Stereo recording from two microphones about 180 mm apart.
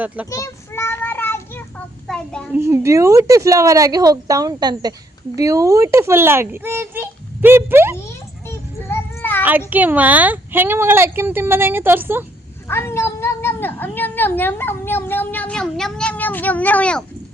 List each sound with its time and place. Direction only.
0.3 s child singing: 15° left (ahead or behind)
2.0 s a child's voice: 5° left (ahead or behind)
2.5 s a woman's voice: 15° right (ahead or behind)
8.4 s child singing: 10° left (ahead or behind)
9.4 s a woman's voice: 10° right (ahead or behind)
12.6 s cat: 15° left (ahead or behind)